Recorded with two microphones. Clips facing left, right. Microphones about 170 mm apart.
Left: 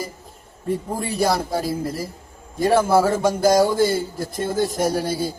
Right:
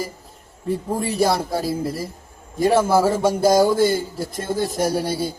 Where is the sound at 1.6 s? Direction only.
25° right (ahead or behind).